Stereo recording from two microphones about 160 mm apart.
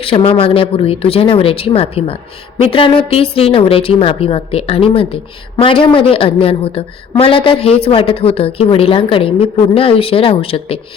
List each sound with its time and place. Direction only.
0.0 s a woman's voice: 35° left (ahead or behind)